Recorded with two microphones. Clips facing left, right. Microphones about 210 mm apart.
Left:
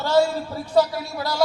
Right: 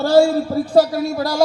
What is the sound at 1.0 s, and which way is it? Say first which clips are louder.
Speech: right 8 dB; 45° right (ahead or behind).